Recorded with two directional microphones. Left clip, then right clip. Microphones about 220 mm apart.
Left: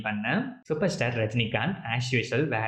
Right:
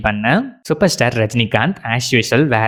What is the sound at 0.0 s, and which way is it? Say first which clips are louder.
Speech: right 13 dB; 50° right (ahead or behind).